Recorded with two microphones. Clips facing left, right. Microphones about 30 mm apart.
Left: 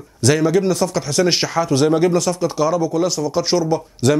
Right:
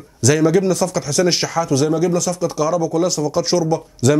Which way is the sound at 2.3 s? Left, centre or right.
Left.